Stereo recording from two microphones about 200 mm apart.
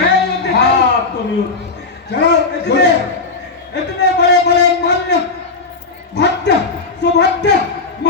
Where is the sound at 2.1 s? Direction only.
60° left (ahead or behind).